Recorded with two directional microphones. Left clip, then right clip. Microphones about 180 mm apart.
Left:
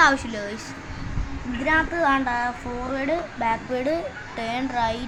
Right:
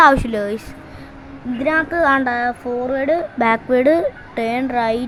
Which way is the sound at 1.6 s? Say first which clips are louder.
Right 5 dB; 60° right (ahead or behind).